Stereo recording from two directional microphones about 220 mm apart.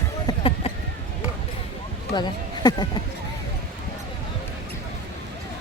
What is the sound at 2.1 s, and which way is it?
Speech, 20° left (ahead or behind).